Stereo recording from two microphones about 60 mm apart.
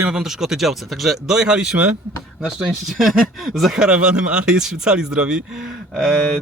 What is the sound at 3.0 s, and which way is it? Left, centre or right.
Speech, centre.